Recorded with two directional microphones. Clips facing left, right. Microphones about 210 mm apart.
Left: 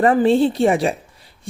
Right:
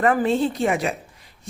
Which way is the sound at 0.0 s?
30° left (ahead or behind).